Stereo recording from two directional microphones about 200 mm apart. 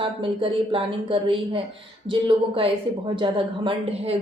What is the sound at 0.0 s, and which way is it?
A woman's voice, 25° right (ahead or behind).